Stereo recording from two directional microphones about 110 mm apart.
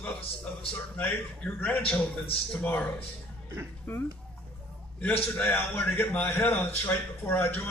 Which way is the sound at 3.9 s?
15° left (ahead or behind).